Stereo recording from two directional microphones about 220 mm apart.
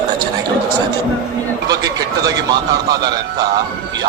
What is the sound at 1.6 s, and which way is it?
A man's voice, 15° right (ahead or behind).